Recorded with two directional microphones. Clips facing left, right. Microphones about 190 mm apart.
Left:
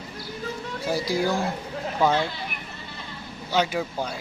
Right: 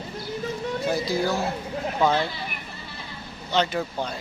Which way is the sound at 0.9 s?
10° left (ahead or behind).